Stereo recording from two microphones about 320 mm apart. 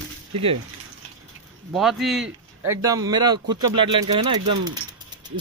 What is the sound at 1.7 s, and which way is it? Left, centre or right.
A man's voice, centre.